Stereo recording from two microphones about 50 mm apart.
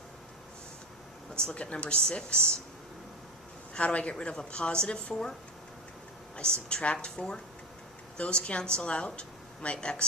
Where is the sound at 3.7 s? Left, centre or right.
Left.